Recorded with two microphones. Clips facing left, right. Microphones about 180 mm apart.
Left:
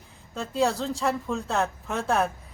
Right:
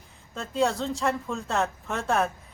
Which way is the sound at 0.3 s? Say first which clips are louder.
Left 1 dB; centre (ahead or behind).